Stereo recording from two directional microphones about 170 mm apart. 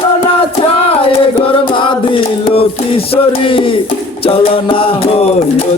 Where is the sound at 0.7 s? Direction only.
35° left (ahead or behind).